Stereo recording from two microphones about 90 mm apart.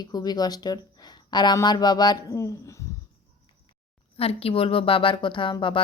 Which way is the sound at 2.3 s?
35° left (ahead or behind).